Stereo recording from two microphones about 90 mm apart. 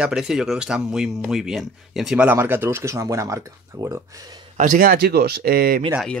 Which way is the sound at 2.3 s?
25° right (ahead or behind).